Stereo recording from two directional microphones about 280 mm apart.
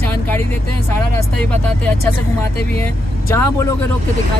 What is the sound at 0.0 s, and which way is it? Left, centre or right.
Speech, centre.